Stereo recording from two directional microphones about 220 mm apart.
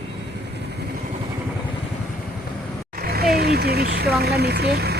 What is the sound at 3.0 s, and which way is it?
Speech, 45° right (ahead or behind).